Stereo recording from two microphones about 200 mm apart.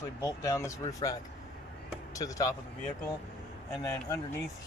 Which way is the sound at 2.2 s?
15° left (ahead or behind).